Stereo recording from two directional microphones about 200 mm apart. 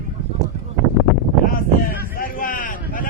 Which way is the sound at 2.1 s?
45° left (ahead or behind).